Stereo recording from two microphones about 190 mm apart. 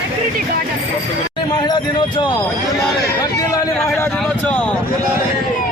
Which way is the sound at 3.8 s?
15° left (ahead or behind).